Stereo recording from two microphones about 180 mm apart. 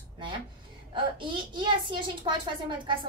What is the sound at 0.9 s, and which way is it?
A woman's voice, 25° right (ahead or behind).